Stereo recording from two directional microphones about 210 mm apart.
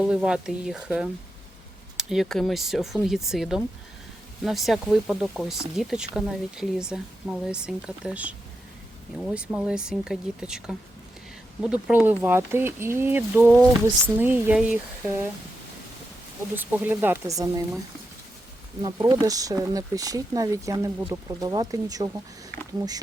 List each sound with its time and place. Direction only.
0.0 s speech: 5° right (ahead or behind)
16.6 s speech: 10° right (ahead or behind)
18.8 s speech: 20° right (ahead or behind)